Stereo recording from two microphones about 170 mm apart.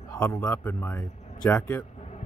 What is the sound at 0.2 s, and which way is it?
Speech, 10° left (ahead or behind).